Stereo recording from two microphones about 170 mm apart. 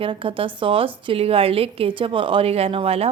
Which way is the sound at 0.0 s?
30° right (ahead or behind).